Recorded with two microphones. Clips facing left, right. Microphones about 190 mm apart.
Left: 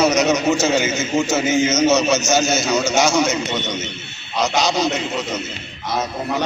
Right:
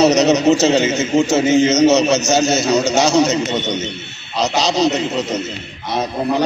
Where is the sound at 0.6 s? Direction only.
70° right (ahead or behind).